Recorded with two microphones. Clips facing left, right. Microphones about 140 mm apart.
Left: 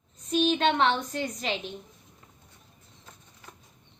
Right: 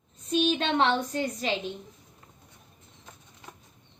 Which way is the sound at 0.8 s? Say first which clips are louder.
Right 1 dB; 35° right (ahead or behind).